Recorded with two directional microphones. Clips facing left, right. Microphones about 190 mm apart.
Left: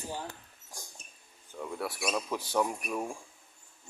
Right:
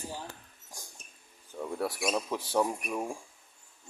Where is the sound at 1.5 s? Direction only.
20° right (ahead or behind).